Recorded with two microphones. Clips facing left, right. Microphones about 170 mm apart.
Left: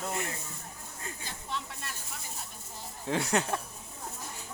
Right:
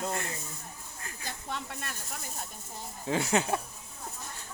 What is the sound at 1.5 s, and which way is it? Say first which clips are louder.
Snake: even; 50° right (ahead or behind).